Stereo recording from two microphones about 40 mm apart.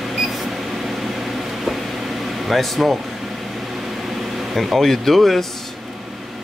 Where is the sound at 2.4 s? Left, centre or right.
Centre.